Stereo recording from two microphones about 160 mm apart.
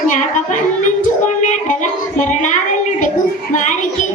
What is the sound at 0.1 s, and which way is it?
Speech, 50° left (ahead or behind).